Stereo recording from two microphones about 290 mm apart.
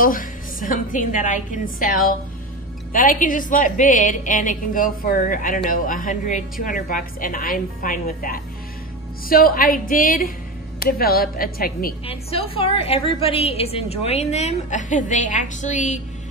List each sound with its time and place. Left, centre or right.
0.0 s a woman's voice: left
12.1 s a woman's voice: centre